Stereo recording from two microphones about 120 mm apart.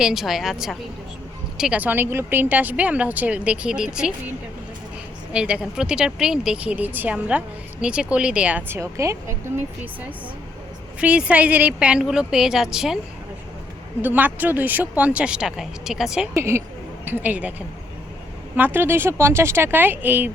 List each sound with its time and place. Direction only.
0.0 s a woman's voice: centre (ahead or behind)
5.3 s speech: 10° right (ahead or behind); by 9.3 s 25° right (ahead or behind)
11.0 s speech: 10° right (ahead or behind)
14.0 s speech: 15° right (ahead or behind)
16.3 s speech: 20° right (ahead or behind)
18.5 s speech: 15° right (ahead or behind)